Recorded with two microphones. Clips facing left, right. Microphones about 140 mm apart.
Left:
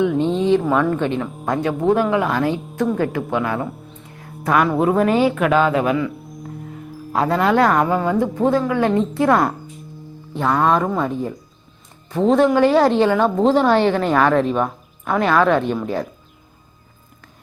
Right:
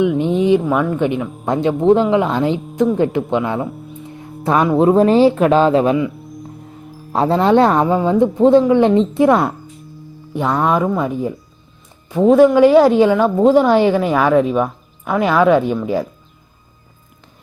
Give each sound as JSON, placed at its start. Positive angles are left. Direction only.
{"t": 0.0, "sound": "speech", "side_deg": -15}
{"t": 7.1, "sound": "a woman's voice", "side_deg": -25}